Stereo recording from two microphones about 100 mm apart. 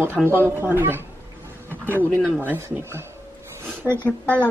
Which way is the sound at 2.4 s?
20° right (ahead or behind).